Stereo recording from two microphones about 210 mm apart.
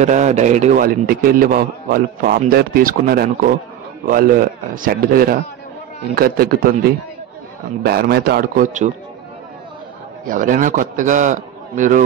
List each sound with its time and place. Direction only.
0.0 s a man's voice: 35° right (ahead or behind)
7.8 s speech: 50° right (ahead or behind)
10.2 s a man's voice: 40° right (ahead or behind)